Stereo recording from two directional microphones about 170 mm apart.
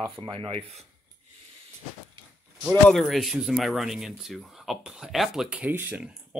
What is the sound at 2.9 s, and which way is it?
Speech, centre (ahead or behind).